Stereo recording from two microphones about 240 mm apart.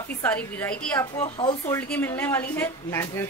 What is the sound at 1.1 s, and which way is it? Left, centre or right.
Speech, centre.